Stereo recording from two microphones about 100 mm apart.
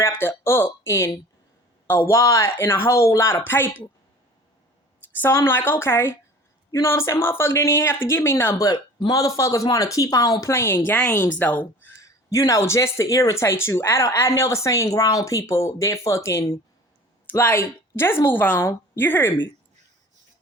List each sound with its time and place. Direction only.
0.0 s speech: 25° left (ahead or behind)
5.1 s a woman's voice: 25° left (ahead or behind)